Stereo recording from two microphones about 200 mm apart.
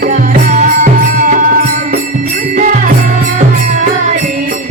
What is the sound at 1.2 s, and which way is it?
Music, 40° right (ahead or behind).